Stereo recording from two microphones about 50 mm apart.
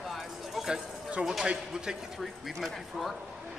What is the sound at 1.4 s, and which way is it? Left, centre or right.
Speech, centre.